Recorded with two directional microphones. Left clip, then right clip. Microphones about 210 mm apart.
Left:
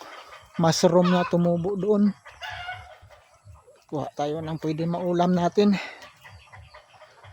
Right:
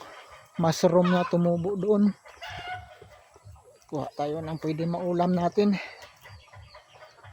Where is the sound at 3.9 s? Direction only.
10° left (ahead or behind).